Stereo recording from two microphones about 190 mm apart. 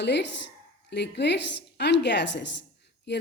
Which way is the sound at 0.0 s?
65° left (ahead or behind).